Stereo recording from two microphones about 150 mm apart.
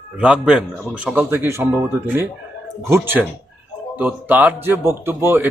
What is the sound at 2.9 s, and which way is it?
Speech, 15° right (ahead or behind).